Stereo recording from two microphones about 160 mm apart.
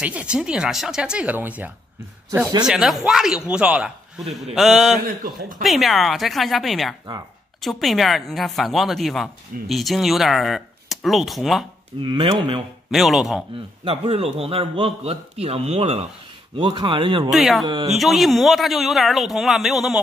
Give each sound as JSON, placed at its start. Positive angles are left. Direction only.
{"t": 0.0, "sound": "a woman's voice", "side_deg": -10}
{"t": 5.0, "sound": "speech", "side_deg": -55}
{"t": 5.6, "sound": "a woman's voice", "side_deg": 0}
{"t": 12.0, "sound": "a man's voice", "side_deg": -30}
{"t": 12.9, "sound": "a woman's voice", "side_deg": 0}
{"t": 13.8, "sound": "a man's voice", "side_deg": -35}
{"t": 17.3, "sound": "a woman's voice", "side_deg": 0}